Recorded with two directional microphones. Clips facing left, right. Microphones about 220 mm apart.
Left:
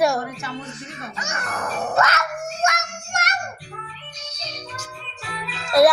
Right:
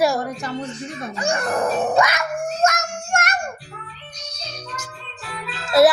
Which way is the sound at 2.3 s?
35° right (ahead or behind).